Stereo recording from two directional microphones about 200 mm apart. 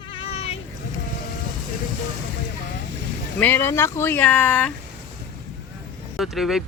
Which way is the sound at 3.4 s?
10° left (ahead or behind).